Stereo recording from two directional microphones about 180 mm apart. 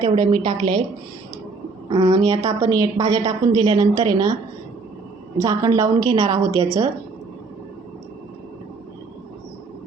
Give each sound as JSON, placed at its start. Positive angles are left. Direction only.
{"t": 0.0, "sound": "a woman's voice", "side_deg": -25}
{"t": 1.9, "sound": "a woman's voice", "side_deg": -20}
{"t": 5.4, "sound": "a woman's voice", "side_deg": -20}